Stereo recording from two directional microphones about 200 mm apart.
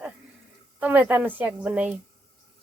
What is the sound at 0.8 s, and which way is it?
Speech, 10° right (ahead or behind).